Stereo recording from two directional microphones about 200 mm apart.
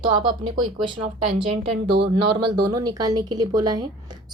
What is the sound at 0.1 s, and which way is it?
Speech, 20° right (ahead or behind).